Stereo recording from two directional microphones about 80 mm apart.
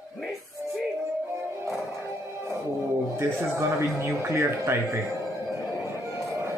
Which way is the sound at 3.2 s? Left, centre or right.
Right.